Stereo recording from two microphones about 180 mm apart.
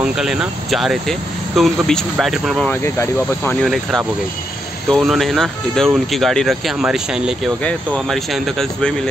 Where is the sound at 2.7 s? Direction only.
10° left (ahead or behind).